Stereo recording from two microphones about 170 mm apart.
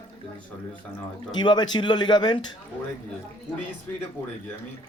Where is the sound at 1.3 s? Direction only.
25° left (ahead or behind).